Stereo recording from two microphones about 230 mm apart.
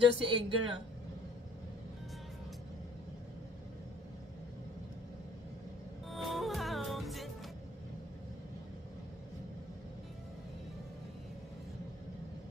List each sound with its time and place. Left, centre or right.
0.0 s speech: right
6.0 s music: centre